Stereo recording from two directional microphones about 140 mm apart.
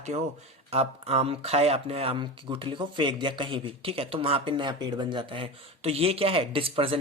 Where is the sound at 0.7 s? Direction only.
45° right (ahead or behind).